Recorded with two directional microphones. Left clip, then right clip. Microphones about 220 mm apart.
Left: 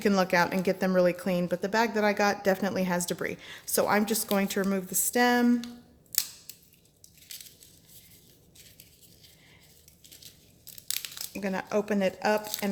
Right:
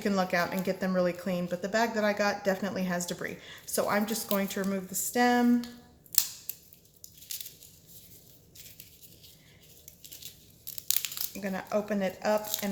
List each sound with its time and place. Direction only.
0.0 s speech: 45° left (ahead or behind)
7.3 s a sound: centre (ahead or behind)
10.8 s crumpling: 5° left (ahead or behind)
11.3 s speech: 45° left (ahead or behind)